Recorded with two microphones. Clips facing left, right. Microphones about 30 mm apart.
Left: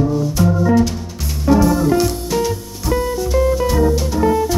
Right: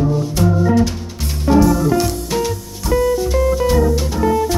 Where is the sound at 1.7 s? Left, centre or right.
Centre.